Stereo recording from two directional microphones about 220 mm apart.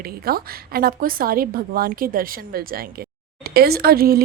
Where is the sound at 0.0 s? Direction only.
45° right (ahead or behind).